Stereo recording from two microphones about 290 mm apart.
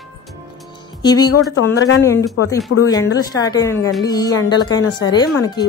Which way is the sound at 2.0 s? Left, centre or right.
Centre.